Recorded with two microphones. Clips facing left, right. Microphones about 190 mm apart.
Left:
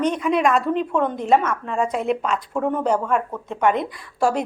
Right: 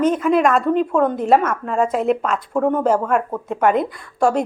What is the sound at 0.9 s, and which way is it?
Speech, 45° right (ahead or behind).